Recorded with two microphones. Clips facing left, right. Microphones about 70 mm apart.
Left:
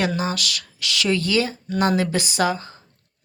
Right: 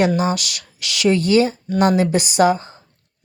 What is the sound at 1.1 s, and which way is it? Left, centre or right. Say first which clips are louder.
Speech: right 7 dB; right.